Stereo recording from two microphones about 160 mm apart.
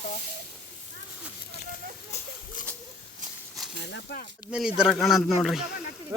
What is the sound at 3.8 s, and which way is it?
Speech, 90° left.